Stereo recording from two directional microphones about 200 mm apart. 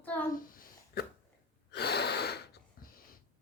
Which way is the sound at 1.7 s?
55° left (ahead or behind).